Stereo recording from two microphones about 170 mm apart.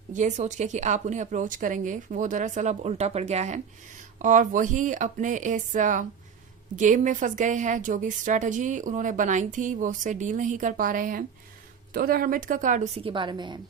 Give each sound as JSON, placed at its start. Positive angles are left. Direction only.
{"t": 0.1, "sound": "a woman's voice", "side_deg": -45}